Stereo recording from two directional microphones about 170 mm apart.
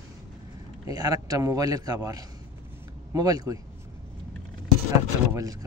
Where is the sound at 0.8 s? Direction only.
20° right (ahead or behind).